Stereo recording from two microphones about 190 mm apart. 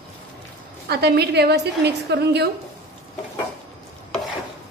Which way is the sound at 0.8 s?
60° right (ahead or behind).